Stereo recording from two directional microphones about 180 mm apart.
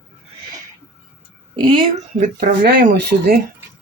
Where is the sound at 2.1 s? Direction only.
55° right (ahead or behind).